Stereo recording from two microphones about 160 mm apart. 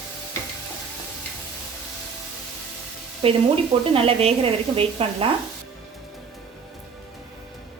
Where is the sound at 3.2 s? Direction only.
35° right (ahead or behind).